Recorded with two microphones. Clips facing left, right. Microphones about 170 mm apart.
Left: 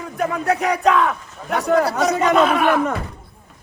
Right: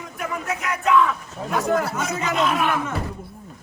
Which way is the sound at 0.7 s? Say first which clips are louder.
Right 1 dB; 75° left (ahead or behind).